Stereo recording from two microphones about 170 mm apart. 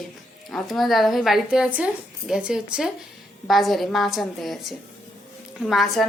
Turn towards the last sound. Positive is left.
turn(degrees=0)  # may be behind; listen again after turning